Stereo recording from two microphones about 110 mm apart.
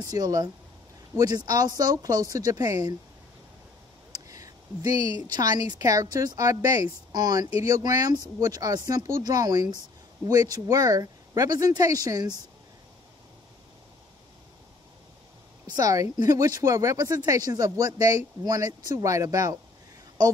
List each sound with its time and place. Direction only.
0.0 s speech: 35° right (ahead or behind)
4.1 s a sound: 30° right (ahead or behind)
5.2 s speech: 35° right (ahead or behind)
15.7 s speech: 30° right (ahead or behind)